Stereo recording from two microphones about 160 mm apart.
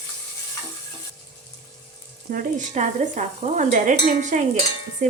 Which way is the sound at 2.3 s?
55° right (ahead or behind).